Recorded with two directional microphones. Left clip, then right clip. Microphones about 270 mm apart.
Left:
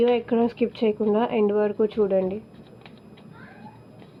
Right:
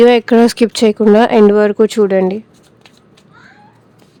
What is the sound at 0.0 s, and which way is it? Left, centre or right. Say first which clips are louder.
Speech: right 13 dB; right.